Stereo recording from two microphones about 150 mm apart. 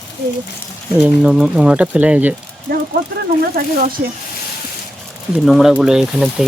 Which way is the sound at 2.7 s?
90° right.